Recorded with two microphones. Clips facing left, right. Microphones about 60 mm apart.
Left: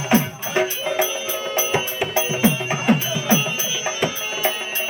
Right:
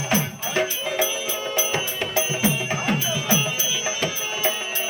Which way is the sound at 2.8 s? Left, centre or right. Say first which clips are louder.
Left 6 dB; centre.